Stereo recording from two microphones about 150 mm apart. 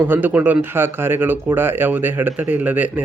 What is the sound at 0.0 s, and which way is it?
Speech, 10° right (ahead or behind).